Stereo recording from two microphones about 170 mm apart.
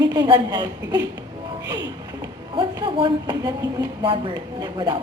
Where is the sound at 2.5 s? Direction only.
30° right (ahead or behind).